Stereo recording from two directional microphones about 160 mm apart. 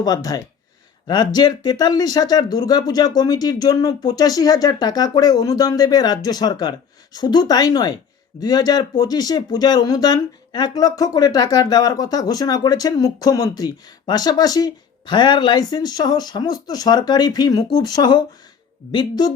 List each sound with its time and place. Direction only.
0.0 s speech: 25° left (ahead or behind)